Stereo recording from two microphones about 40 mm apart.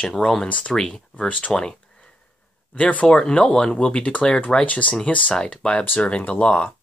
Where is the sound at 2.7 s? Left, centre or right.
Left.